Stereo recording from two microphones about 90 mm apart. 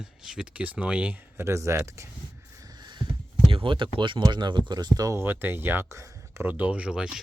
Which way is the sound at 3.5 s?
80° right.